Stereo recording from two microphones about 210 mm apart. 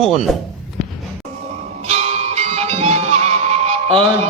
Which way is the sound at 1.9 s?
30° right (ahead or behind).